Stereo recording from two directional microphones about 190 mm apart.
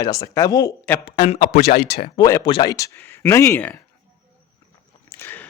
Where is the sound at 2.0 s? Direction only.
20° left (ahead or behind).